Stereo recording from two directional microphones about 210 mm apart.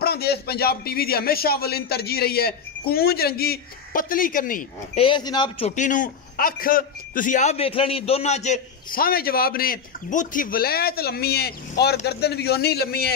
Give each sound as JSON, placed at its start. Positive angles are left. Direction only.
{"t": 0.0, "sound": "a man's voice", "side_deg": 50}
{"t": 4.9, "sound": "a man's voice", "side_deg": 25}
{"t": 5.8, "sound": "a man's voice", "side_deg": 40}